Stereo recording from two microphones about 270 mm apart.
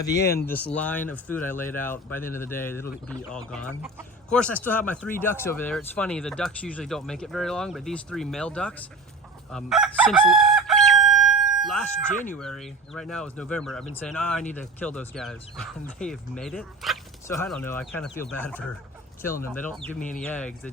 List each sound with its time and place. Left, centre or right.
0.1 s speech: left
0.4 s speech: centre
9.5 s chicken: centre
12.1 s speech: left
12.4 s speech: centre